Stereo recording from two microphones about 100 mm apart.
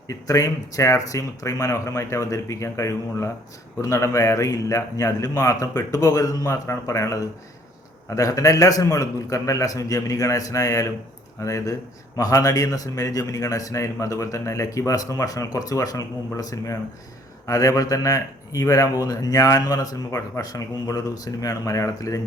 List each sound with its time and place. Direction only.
0.1 s speech: 35° left (ahead or behind)